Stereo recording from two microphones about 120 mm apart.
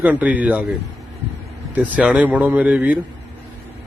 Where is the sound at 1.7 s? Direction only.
10° right (ahead or behind).